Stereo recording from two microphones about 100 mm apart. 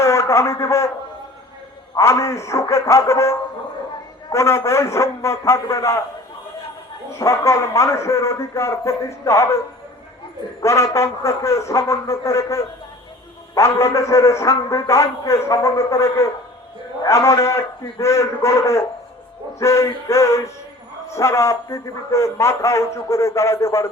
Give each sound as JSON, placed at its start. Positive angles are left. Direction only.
{"t": 0.0, "sound": "a man's voice", "side_deg": 30}
{"t": 2.0, "sound": "a man's voice", "side_deg": 30}
{"t": 7.1, "sound": "a man's voice", "side_deg": 30}
{"t": 10.6, "sound": "a man's voice", "side_deg": 30}